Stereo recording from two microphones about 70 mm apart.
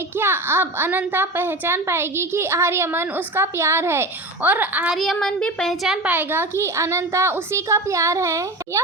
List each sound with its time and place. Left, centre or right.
0.2 s a woman's voice: right
5.2 s speech: centre
6.1 s a woman's voice: right